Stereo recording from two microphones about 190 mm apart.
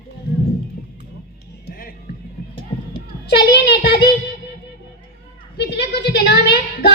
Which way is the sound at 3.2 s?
60° left (ahead or behind).